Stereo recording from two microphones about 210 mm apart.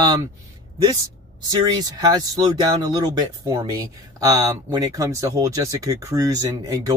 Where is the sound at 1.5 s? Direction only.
20° right (ahead or behind).